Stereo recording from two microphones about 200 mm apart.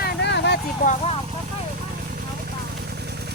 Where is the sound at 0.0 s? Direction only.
60° left (ahead or behind).